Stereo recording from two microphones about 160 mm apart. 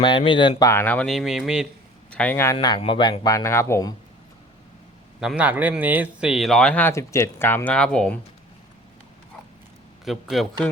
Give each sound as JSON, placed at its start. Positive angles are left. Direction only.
{"t": 0.0, "sound": "speech", "side_deg": 30}
{"t": 0.7, "sound": "speech", "side_deg": 10}
{"t": 2.0, "sound": "speech", "side_deg": 10}
{"t": 5.2, "sound": "speech", "side_deg": -5}
{"t": 10.1, "sound": "speech", "side_deg": 0}